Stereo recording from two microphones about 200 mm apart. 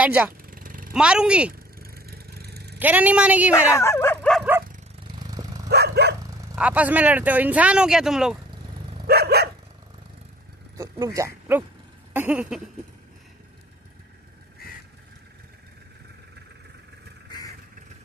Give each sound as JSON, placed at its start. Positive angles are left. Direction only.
{"t": 0.0, "sound": "speech", "side_deg": -10}
{"t": 0.5, "sound": "vehicle", "side_deg": -45}
{"t": 0.9, "sound": "speech", "side_deg": -5}
{"t": 1.5, "sound": "vehicle", "side_deg": -50}
{"t": 2.8, "sound": "speech", "side_deg": -10}
{"t": 3.5, "sound": "speech", "side_deg": 15}
{"t": 5.7, "sound": "dog", "side_deg": -55}
{"t": 6.5, "sound": "speech", "side_deg": -5}
{"t": 9.0, "sound": "dog", "side_deg": -55}
{"t": 10.8, "sound": "speech", "side_deg": -15}
{"t": 12.1, "sound": "a sound", "side_deg": -10}